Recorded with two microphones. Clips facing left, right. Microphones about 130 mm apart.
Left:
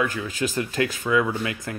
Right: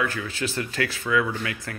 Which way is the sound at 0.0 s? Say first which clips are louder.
Left 2 dB; 20° left (ahead or behind).